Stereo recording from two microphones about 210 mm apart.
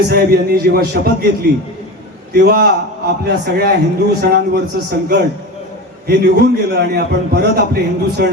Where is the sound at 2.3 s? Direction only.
50° right (ahead or behind).